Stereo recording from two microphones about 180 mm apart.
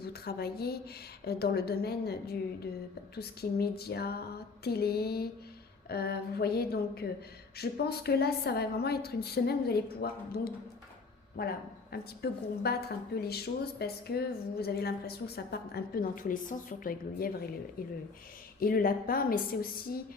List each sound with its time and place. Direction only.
0.0 s a woman's voice: 60° left (ahead or behind)